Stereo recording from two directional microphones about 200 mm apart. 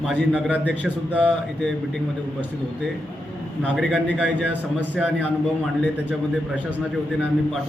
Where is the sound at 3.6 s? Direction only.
Centre (ahead or behind).